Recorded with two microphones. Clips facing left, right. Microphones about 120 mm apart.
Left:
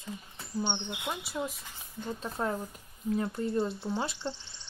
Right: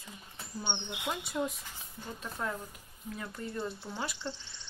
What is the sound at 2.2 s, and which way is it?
Speech, 30° left (ahead or behind).